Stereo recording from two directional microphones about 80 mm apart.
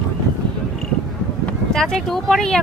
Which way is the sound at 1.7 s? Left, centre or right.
Centre.